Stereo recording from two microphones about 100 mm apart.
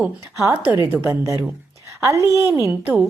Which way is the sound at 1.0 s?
30° right (ahead or behind).